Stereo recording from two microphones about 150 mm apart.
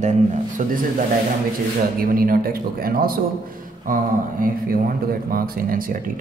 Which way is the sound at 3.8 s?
65° right (ahead or behind).